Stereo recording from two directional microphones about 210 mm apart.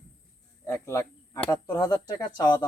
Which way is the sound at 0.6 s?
15° left (ahead or behind).